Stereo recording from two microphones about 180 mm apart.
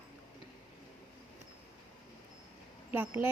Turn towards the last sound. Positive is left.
turn(degrees=-10)  # may be behind; listen again after turning